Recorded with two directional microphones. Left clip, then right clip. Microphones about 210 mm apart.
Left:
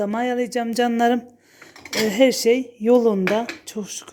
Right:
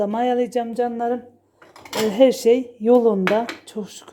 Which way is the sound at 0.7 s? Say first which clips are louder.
Left 3 dB; 25° left (ahead or behind).